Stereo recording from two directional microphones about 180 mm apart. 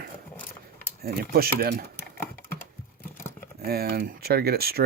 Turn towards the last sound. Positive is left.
turn(degrees=-60)  # may be behind; listen again after turning